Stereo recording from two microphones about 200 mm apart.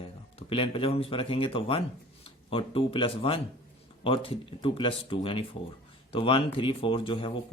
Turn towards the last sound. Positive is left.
turn(degrees=25)  # may be behind; listen again after turning